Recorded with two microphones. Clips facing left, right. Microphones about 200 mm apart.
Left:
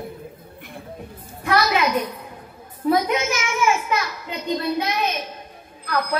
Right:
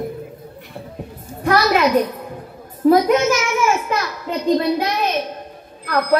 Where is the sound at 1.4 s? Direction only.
50° right (ahead or behind).